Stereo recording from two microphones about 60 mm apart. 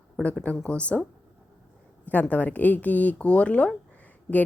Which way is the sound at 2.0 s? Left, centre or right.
Left.